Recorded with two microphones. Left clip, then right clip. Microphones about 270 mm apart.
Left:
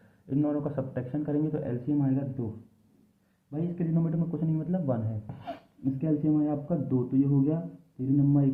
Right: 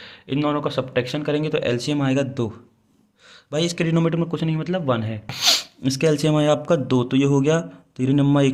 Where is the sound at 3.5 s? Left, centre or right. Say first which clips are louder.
Right 12 dB; right.